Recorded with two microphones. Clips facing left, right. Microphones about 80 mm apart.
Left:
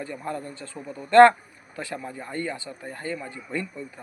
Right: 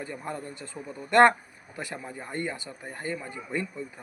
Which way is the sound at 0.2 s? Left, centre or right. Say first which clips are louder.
Left 3 dB; centre.